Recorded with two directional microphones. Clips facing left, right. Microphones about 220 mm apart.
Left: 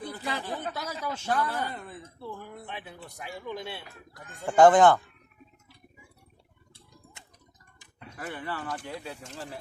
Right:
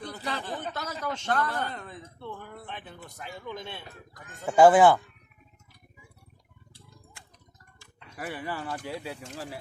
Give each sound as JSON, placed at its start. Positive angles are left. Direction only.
{"t": 0.0, "sound": "a man's voice", "side_deg": 10}
{"t": 4.4, "sound": "speech", "side_deg": -10}
{"t": 6.7, "sound": "a sound", "side_deg": 20}
{"t": 8.1, "sound": "speech", "side_deg": -10}